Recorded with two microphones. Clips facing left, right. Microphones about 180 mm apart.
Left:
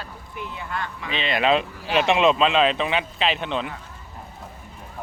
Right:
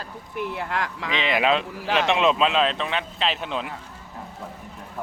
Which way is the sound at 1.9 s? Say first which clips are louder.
Left 2 dB; centre (ahead or behind).